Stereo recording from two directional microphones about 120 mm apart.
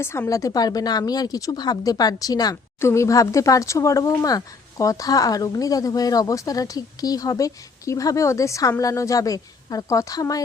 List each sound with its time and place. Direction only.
0.0 s a woman's voice: 20° left (ahead or behind)